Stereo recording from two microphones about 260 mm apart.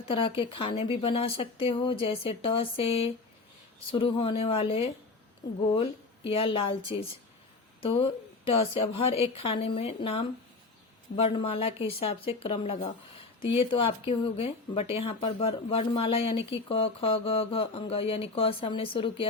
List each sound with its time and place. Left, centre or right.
0.1 s speech: centre
8.4 s speech: left